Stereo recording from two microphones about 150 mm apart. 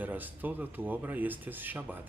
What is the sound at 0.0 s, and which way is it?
Speech, 10° right (ahead or behind).